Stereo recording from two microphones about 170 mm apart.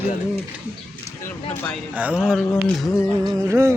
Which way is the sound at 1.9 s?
5° right (ahead or behind).